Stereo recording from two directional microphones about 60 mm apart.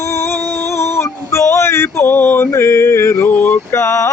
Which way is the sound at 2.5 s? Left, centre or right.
Left.